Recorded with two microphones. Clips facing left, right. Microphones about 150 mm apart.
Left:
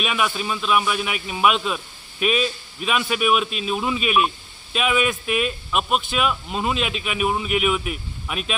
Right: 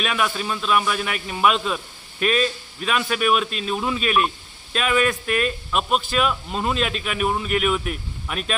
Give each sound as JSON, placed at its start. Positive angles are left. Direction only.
{"t": 0.0, "sound": "a man's voice", "side_deg": 5}